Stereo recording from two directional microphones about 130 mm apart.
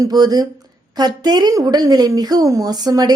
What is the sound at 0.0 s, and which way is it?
A woman's voice, 30° right (ahead or behind).